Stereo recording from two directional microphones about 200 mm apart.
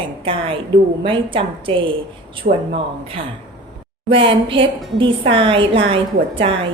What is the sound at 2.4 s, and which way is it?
Speech, 35° right (ahead or behind).